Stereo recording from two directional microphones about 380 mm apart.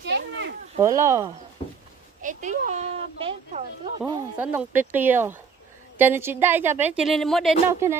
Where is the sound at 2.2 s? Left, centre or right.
Centre.